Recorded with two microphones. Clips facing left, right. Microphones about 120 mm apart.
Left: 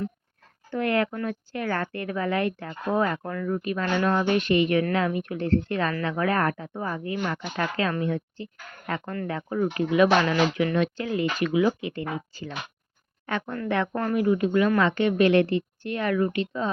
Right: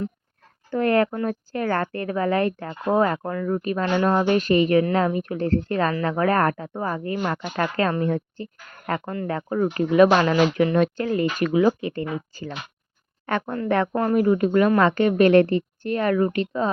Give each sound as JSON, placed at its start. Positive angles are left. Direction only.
{"t": 0.7, "sound": "speech", "side_deg": -40}
{"t": 13.9, "sound": "speech", "side_deg": -30}
{"t": 14.2, "sound": "speech", "side_deg": -45}